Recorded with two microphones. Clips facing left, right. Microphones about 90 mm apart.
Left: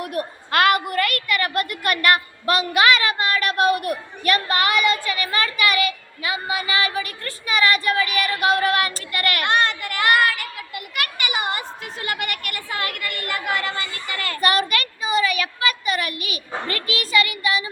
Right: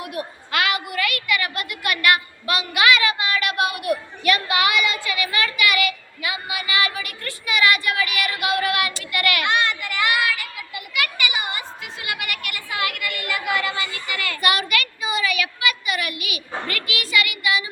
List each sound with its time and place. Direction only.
0.0 s a woman's voice: 45° left (ahead or behind)
11.3 s a sound: 45° left (ahead or behind)
16.6 s speech: 35° left (ahead or behind)